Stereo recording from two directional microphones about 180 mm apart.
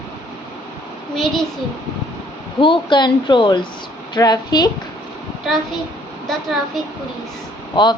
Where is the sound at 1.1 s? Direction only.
Centre (ahead or behind).